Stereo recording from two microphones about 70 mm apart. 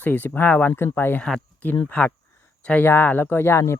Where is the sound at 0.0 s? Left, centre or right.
Left.